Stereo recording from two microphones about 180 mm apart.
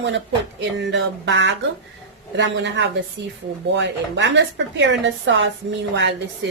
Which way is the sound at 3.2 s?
90° right.